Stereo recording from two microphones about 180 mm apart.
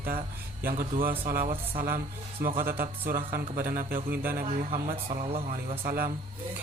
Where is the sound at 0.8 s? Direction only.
50° right (ahead or behind).